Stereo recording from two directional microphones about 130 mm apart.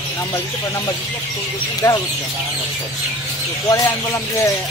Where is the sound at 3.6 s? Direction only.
25° left (ahead or behind).